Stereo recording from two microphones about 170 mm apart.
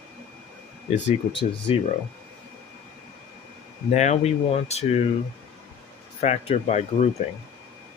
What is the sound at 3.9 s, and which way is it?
Speech, 40° left (ahead or behind).